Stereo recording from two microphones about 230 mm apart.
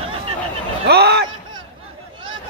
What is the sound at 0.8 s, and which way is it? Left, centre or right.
Speech, right.